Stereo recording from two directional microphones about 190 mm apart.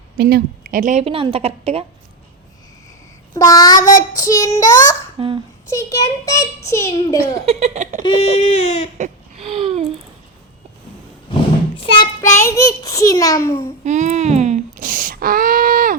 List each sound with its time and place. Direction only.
0.2 s a woman's voice: 55° right (ahead or behind); by 1.8 s 30° right (ahead or behind)
3.3 s child singing: 20° left (ahead or behind)
4.1 s a child's voice: 20° left (ahead or behind)
5.2 s a woman's voice: 30° right (ahead or behind)
5.6 s a child's voice: 15° left (ahead or behind)
7.4 s a woman's voice: 35° right (ahead or behind)
8.0 s speech: 35° left (ahead or behind)
9.0 s a sound: 35° right (ahead or behind)
11.8 s child singing: 25° left (ahead or behind)
12.2 s a child's voice: 15° left (ahead or behind)
13.8 s a sound: 40° right (ahead or behind)